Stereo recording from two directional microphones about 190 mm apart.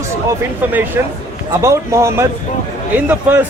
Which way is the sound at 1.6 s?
15° right (ahead or behind).